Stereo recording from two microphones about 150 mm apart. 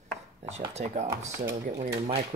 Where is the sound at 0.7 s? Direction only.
45° right (ahead or behind).